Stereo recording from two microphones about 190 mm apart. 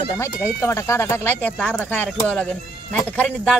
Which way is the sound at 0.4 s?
15° left (ahead or behind).